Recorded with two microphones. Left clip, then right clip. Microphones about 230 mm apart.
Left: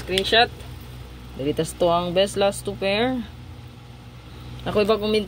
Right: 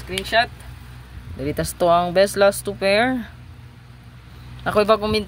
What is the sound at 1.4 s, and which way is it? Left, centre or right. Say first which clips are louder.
Speech: right 1 dB; right.